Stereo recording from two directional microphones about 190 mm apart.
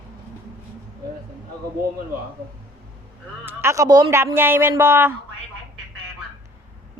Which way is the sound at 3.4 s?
15° right (ahead or behind).